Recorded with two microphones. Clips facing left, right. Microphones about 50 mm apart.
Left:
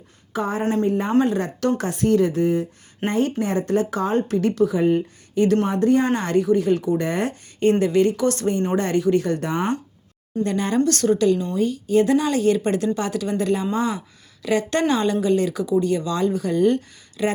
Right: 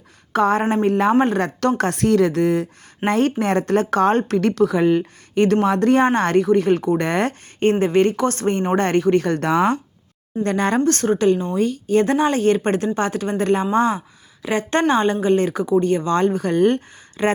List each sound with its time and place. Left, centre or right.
0.3 s speech: right
1.2 s speech: right
1.8 s speech: right
3.1 s speech: right
6.1 s speech: right
7.6 s speech: right
10.4 s speech: right
10.8 s speech: right
11.5 s speech: right